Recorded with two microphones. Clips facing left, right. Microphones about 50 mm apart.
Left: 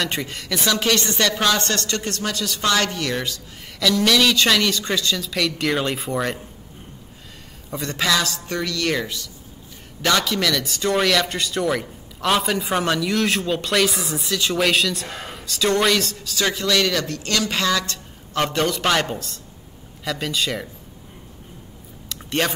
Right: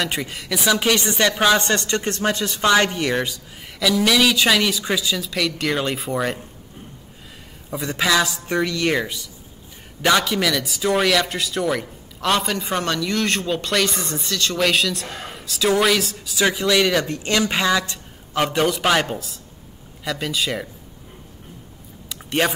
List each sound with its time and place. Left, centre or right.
0.0 s speech: centre
7.7 s speech: centre
22.1 s a sound: centre